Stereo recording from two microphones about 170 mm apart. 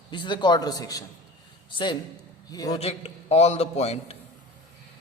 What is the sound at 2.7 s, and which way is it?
A man's voice, 40° left (ahead or behind).